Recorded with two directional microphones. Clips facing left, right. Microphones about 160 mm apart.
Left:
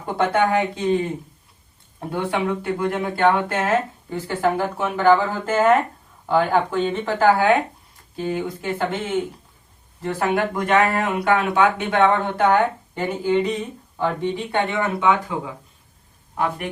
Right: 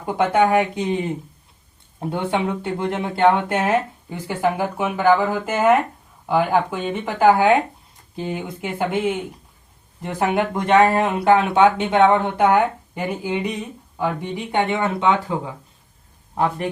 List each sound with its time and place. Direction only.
0.0 s speech: 15° right (ahead or behind)